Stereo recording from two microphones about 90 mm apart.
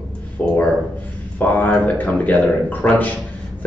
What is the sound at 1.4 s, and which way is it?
A man's voice, 20° left (ahead or behind).